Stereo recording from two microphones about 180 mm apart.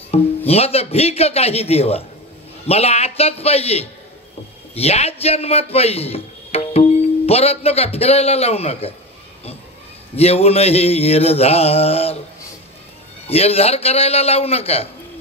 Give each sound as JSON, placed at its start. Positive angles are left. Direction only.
{"t": 0.1, "sound": "mantra", "side_deg": 35}
{"t": 4.7, "sound": "a man's voice", "side_deg": 35}
{"t": 10.1, "sound": "mantra", "side_deg": 35}
{"t": 13.3, "sound": "mantra", "side_deg": 35}